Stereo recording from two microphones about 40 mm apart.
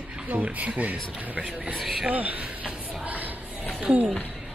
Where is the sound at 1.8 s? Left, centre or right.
Centre.